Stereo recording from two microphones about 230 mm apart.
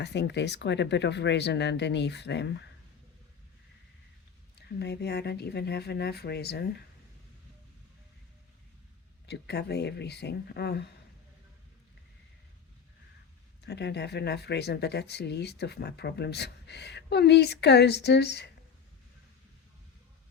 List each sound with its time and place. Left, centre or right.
0.0 s speech: left
4.8 s speech: left
9.2 s speech: left
13.7 s speech: left